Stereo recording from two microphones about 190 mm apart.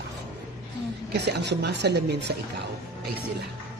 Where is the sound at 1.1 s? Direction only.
60° right (ahead or behind).